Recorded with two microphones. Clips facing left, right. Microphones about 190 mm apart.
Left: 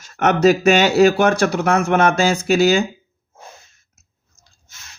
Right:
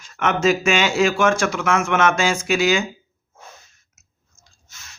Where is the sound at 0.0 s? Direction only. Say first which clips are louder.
Left 5 dB; 40° left (ahead or behind).